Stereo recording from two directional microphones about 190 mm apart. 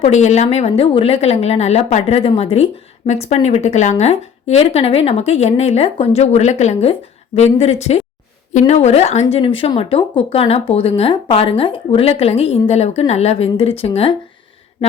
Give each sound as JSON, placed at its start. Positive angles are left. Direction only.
{"t": 0.0, "sound": "a woman's voice", "side_deg": 35}